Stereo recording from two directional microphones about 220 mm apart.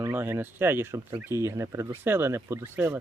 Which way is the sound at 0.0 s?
10° right (ahead or behind).